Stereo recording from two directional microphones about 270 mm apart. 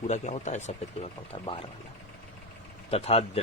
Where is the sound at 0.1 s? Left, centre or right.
Left.